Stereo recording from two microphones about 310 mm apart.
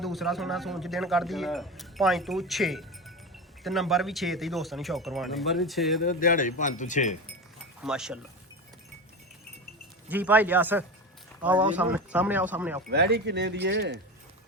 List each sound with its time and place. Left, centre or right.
0.0 s speech: centre
6.0 s speech: left
7.8 s speech: centre
10.1 s speech: centre
12.9 s speech: right